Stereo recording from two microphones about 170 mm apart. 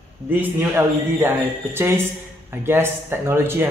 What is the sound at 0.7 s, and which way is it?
A woman's voice, 15° right (ahead or behind).